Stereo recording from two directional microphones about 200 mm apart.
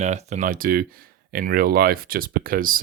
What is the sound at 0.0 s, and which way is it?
Speech, 35° right (ahead or behind).